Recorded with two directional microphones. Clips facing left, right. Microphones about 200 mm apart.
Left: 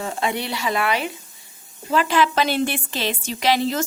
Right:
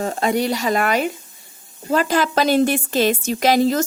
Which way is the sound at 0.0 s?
40° right (ahead or behind).